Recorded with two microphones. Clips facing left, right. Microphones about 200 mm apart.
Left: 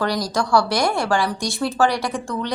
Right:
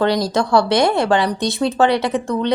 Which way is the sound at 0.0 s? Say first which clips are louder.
Right 5 dB; 25° right (ahead or behind).